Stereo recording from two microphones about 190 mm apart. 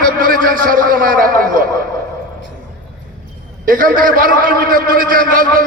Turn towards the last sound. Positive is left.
turn(degrees=-45)  # may be behind; listen again after turning